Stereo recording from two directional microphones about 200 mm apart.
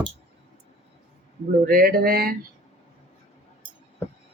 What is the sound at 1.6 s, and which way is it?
Speech, 45° right (ahead or behind).